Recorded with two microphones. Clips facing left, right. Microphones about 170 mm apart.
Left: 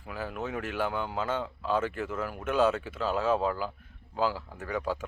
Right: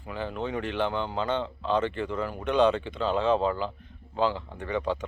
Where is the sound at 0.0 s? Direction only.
5° left (ahead or behind).